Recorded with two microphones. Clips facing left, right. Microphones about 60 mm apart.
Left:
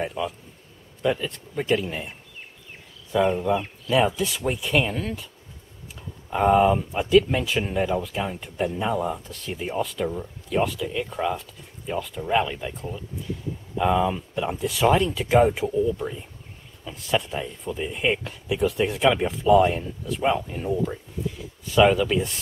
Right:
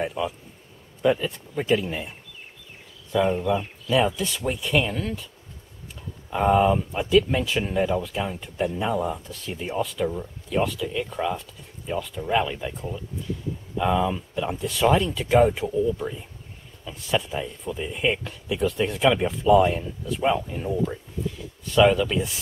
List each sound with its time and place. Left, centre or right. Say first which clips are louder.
0.0 s speech: right 1 dB; centre
3.1 s speech: left 1 dB; centre
3.9 s speech: left 1 dB; centre